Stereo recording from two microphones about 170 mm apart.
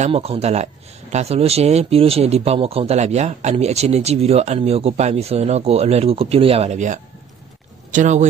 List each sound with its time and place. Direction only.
0.0 s speech: 35° right (ahead or behind)